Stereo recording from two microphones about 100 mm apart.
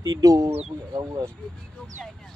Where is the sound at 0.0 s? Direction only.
40° right (ahead or behind).